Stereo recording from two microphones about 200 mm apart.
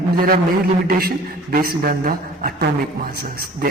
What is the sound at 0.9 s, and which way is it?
A man's voice, 50° right (ahead or behind).